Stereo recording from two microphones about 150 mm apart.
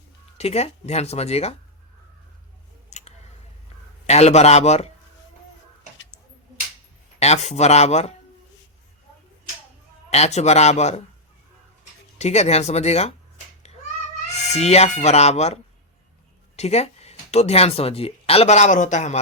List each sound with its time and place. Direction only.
0.3 s speech: 45° left (ahead or behind)
2.9 s a sound: 50° left (ahead or behind)
4.0 s speech: 45° left (ahead or behind)
7.2 s speech: 50° left (ahead or behind)
10.1 s speech: 45° left (ahead or behind)
12.2 s speech: 45° left (ahead or behind)
14.4 s speech: 45° left (ahead or behind)
16.6 s speech: 45° left (ahead or behind)